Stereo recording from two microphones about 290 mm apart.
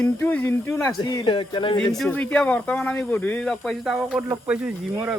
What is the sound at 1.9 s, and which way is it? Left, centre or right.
Speech, centre.